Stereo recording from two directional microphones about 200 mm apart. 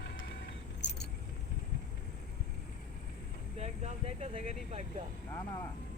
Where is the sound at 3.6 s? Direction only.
35° right (ahead or behind).